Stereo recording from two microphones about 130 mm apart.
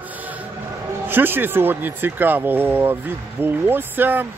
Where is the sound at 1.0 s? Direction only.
15° right (ahead or behind).